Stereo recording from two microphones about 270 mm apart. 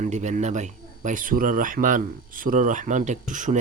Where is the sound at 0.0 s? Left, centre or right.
Right.